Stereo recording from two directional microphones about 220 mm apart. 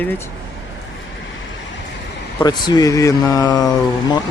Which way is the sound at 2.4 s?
20° left (ahead or behind).